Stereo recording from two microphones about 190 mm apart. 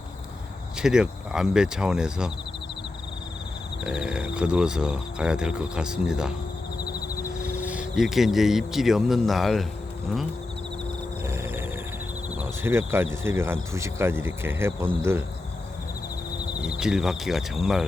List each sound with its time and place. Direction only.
0.8 s speech: 5° right (ahead or behind)
3.8 s speech: 5° right (ahead or behind)
6.8 s cricket: 20° left (ahead or behind)
7.4 s speech: 5° right (ahead or behind)
11.3 s cricket: 10° right (ahead or behind)
12.4 s speech: 10° right (ahead or behind)
16.6 s speech: 5° right (ahead or behind)